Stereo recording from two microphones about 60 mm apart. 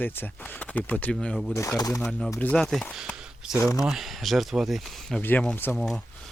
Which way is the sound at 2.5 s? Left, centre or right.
Centre.